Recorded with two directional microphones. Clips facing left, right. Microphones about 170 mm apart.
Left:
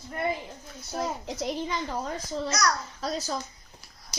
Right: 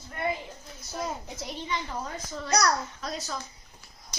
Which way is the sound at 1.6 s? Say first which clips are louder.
Left 3 dB; 35° left (ahead or behind).